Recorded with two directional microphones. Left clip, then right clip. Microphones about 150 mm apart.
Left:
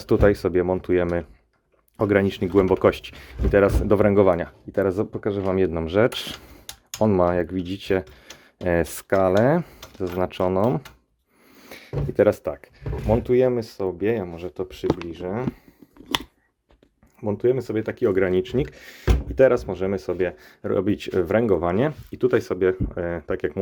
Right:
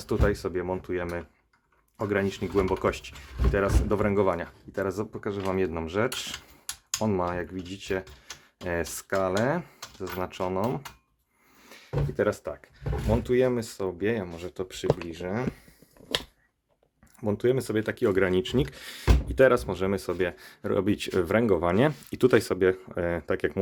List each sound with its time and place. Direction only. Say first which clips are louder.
0.0 s speech: left 9 dB; 40° left (ahead or behind)
11.7 s speech: left 3 dB; 55° left (ahead or behind)
13.1 s speech: left 5 dB; 25° left (ahead or behind)
17.2 s speech: left 4 dB; 5° left (ahead or behind)
22.1 s speech: left 1 dB; 15° right (ahead or behind)
22.4 s speech: left 2 dB; centre (ahead or behind)